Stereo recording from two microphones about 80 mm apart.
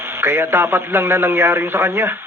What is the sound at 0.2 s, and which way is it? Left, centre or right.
A man's voice, right.